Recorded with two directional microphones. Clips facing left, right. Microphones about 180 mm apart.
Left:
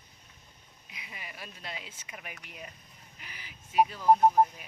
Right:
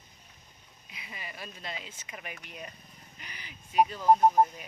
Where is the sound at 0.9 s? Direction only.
10° left (ahead or behind).